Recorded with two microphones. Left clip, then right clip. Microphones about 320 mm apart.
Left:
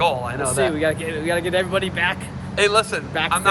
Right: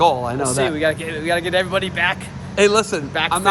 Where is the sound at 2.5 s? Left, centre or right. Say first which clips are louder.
Right 2 dB; right.